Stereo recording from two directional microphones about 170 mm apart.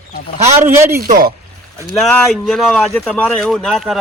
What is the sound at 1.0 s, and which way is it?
Speech, 55° right (ahead or behind).